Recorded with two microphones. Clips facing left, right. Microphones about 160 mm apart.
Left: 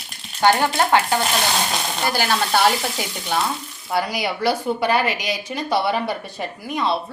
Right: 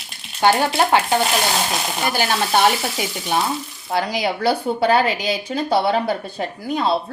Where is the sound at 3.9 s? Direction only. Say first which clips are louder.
Right 2 dB; 25° right (ahead or behind).